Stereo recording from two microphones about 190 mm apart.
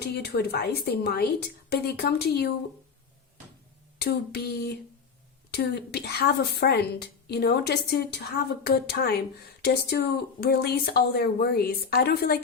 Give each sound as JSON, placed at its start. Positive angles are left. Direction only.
{"t": 0.2, "sound": "speech", "side_deg": 55}
{"t": 3.9, "sound": "speech", "side_deg": 60}